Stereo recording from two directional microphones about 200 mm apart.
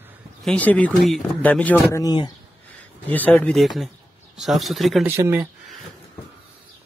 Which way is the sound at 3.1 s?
10° left (ahead or behind).